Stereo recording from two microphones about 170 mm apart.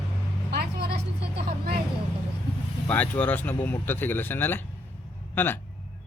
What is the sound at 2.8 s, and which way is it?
Speech, 10° left (ahead or behind).